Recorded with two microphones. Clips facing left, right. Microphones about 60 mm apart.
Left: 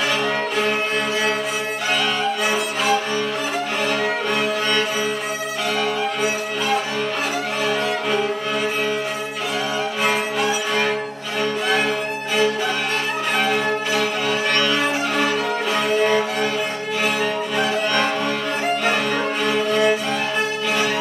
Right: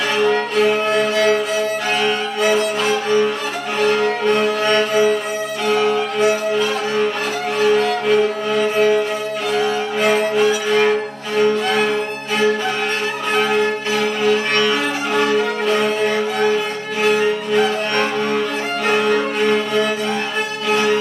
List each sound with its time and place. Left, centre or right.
2.4 s music: centre
4.6 s music: right
7.6 s music: centre
10.0 s music: centre
14.5 s music: centre
18.9 s violin: centre